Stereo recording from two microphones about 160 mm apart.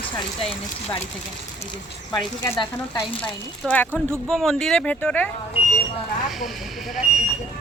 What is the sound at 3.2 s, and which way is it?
Speech, 10° left (ahead or behind).